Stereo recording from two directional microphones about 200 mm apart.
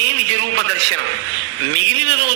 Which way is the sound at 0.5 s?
90° right.